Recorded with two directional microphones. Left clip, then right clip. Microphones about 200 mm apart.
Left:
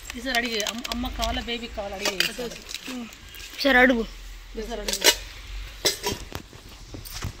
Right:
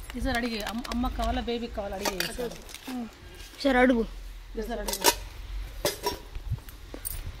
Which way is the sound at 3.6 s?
10° right (ahead or behind).